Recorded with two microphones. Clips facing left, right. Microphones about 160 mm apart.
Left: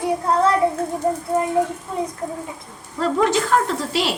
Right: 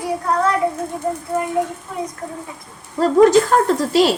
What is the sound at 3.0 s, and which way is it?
Speech, 40° right (ahead or behind).